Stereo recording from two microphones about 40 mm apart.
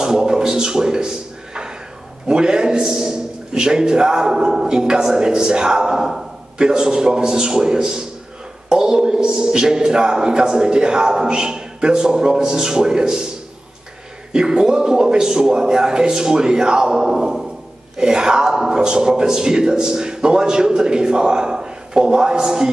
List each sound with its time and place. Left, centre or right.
0.0 s a sound: centre
2.2 s a man's voice: right
14.3 s a man's voice: centre